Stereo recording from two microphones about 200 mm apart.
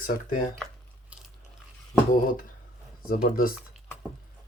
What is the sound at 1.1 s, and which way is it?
Ratchet, 5° right (ahead or behind).